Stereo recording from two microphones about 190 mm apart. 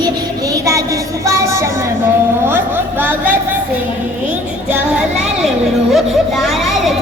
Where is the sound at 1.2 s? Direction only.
15° right (ahead or behind).